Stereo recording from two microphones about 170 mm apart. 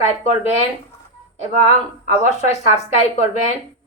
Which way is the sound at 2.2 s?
40° left (ahead or behind).